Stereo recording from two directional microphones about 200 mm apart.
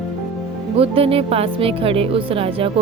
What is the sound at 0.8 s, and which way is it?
A woman's voice, 30° right (ahead or behind).